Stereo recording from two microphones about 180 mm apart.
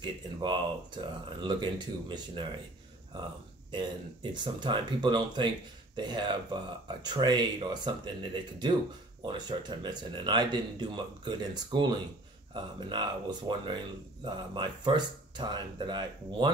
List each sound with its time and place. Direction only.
0.0 s speech: 25° right (ahead or behind)
3.7 s speech: 25° right (ahead or behind)